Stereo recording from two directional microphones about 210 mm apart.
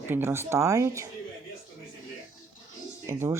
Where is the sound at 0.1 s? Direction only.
10° right (ahead or behind).